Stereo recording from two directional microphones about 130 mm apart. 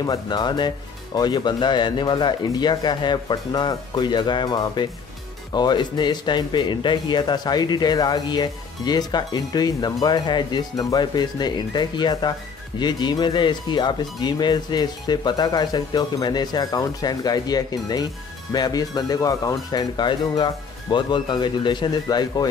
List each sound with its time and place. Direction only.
0.0 s speech: 30° left (ahead or behind)